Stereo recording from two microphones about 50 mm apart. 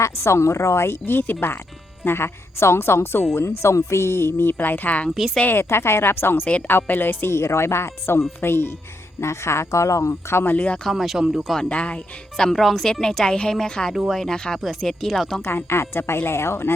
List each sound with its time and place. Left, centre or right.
0.0 s speech: left
3.3 s speech: left
5.1 s speech: centre
5.6 s a woman's voice: left
9.2 s speech: left
10.4 s speech: left
10.8 s speech: centre
11.7 s speech: left
12.5 s speech: centre
12.9 s a woman's voice: centre
14.6 s speech: centre
15.4 s a woman's voice: left